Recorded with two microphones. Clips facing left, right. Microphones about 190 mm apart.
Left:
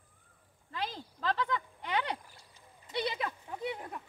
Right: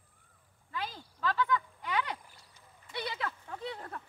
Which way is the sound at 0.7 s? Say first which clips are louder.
Left 2 dB; 35° left (ahead or behind).